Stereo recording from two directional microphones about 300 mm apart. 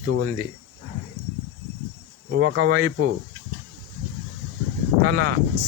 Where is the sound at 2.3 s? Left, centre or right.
Right.